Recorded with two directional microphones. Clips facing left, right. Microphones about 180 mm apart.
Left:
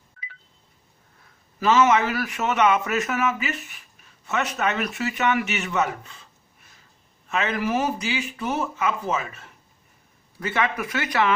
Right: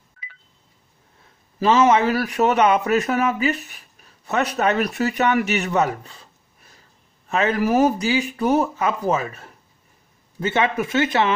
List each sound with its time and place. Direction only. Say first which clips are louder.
1.6 s speech: right 3 dB; 30° right (ahead or behind)
10.4 s speech: right 5 dB; 25° right (ahead or behind)